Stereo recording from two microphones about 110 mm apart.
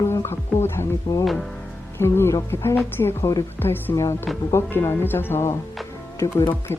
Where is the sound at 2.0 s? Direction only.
25° left (ahead or behind).